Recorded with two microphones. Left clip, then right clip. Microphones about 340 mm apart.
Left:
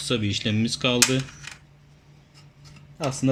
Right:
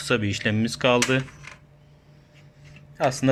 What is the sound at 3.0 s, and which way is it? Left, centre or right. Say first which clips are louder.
Speech: right 4 dB; right.